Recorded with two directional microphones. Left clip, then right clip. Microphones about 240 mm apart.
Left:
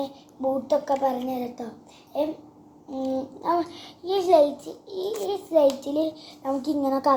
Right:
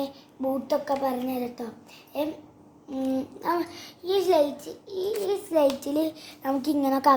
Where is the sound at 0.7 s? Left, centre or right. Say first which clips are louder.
Left 3 dB; right.